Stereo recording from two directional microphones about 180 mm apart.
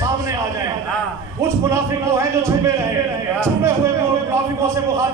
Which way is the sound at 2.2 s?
15° right (ahead or behind).